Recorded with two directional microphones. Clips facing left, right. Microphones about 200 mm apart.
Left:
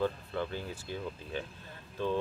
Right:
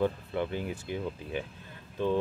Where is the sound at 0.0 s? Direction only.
15° right (ahead or behind).